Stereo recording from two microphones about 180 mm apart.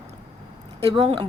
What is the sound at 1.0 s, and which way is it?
Speech, 25° right (ahead or behind).